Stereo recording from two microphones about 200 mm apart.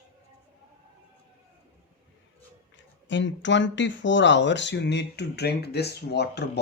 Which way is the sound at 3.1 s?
65° left (ahead or behind).